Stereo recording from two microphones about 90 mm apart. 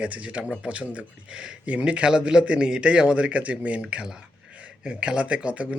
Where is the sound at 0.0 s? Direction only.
15° right (ahead or behind).